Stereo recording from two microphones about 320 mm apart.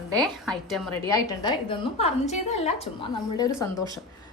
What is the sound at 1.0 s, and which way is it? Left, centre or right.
A woman's voice, centre.